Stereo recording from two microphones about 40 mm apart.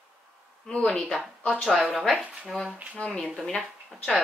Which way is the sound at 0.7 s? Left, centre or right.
Left.